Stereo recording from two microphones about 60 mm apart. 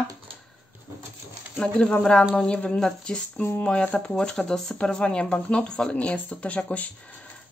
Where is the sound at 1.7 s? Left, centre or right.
Centre.